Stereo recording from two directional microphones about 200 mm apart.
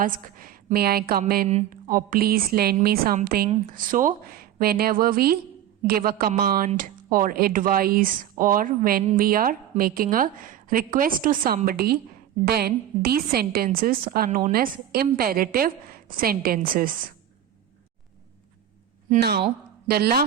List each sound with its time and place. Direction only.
0.0 s a woman's voice: 45° right (ahead or behind)
1.5 s a woman's voice: 35° right (ahead or behind)
19.9 s a woman's voice: 50° right (ahead or behind)